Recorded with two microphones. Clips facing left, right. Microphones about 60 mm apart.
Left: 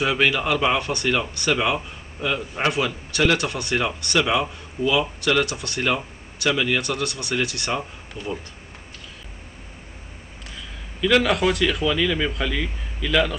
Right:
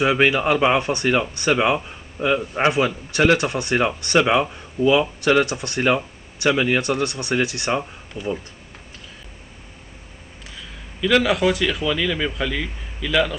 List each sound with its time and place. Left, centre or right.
0.0 s a man's voice: right
10.5 s speech: centre